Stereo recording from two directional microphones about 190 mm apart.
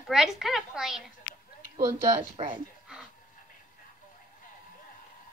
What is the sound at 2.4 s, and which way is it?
Speech, 30° right (ahead or behind).